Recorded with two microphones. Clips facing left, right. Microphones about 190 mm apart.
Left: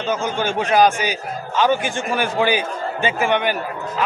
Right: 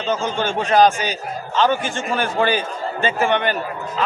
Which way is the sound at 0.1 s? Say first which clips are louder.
Right 1 dB; 10° left (ahead or behind).